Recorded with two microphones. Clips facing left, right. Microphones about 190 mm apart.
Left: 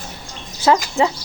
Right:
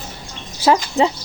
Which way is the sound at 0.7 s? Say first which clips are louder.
Right 1 dB; 20° right (ahead or behind).